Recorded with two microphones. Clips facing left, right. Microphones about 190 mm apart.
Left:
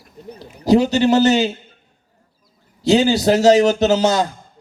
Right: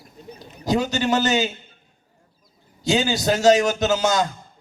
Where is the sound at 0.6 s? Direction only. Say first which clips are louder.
Left 8 dB; 35° left (ahead or behind).